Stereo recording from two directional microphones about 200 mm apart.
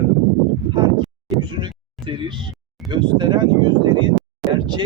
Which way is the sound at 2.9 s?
20° right (ahead or behind).